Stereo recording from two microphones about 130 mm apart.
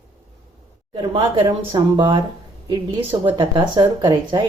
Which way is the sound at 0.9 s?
40° right (ahead or behind).